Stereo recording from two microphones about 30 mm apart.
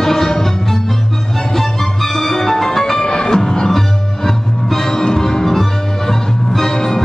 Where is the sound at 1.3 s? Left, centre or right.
Centre.